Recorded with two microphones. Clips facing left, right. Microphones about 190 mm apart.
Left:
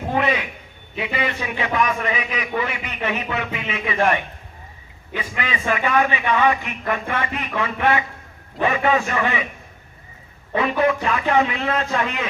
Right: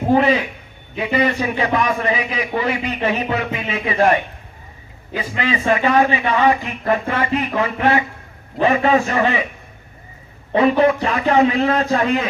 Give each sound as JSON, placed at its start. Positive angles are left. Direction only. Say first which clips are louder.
{"t": 0.1, "sound": "a man's voice", "louder": "right 7 dB", "side_deg": -35}
{"t": 10.5, "sound": "a man's voice", "louder": "right 5 dB", "side_deg": -35}